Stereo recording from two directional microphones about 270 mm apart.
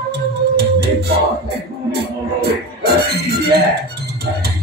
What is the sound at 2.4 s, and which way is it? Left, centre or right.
Music, right.